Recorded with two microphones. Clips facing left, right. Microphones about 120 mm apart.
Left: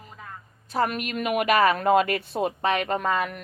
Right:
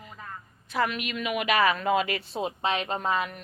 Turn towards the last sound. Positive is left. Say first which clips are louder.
# left 3 dB
turn(degrees=55)  # may be behind; listen again after turning